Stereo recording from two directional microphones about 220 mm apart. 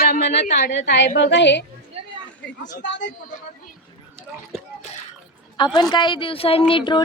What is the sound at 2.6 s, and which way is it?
Speech, 55° left (ahead or behind).